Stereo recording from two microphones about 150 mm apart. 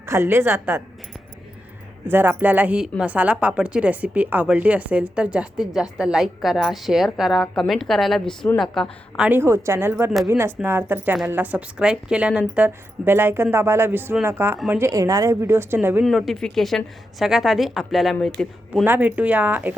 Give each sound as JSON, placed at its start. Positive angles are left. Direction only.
{"t": 0.0, "sound": "a woman's voice", "side_deg": -20}
{"t": 2.0, "sound": "a woman's voice", "side_deg": -15}
{"t": 16.0, "sound": "a woman's voice", "side_deg": 0}
{"t": 18.9, "sound": "a woman's voice", "side_deg": -10}